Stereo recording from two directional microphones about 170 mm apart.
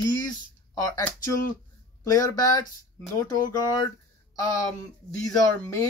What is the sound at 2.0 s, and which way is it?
A man's voice, 20° left (ahead or behind).